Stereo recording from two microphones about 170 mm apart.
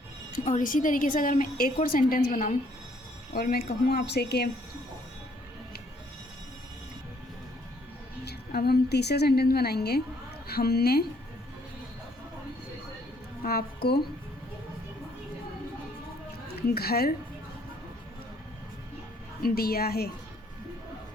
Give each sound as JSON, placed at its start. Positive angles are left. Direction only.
{"t": 0.3, "sound": "a woman's voice", "side_deg": 50}
{"t": 3.3, "sound": "a woman's voice", "side_deg": 65}
{"t": 8.2, "sound": "a woman's voice", "side_deg": 70}
{"t": 13.4, "sound": "a woman's voice", "side_deg": 60}
{"t": 16.6, "sound": "a woman's voice", "side_deg": 65}
{"t": 19.4, "sound": "a woman's voice", "side_deg": 60}